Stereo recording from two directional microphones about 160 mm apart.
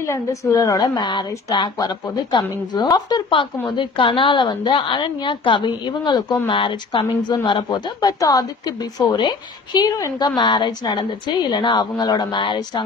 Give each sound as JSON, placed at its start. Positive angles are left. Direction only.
{"t": 0.0, "sound": "a woman's voice", "side_deg": 20}